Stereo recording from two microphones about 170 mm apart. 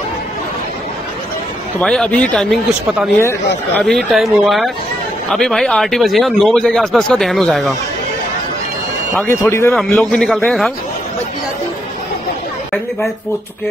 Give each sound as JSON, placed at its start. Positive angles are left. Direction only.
{"t": 1.8, "sound": "speech", "side_deg": 5}
{"t": 9.3, "sound": "speech", "side_deg": 15}
{"t": 9.8, "sound": "speech", "side_deg": 5}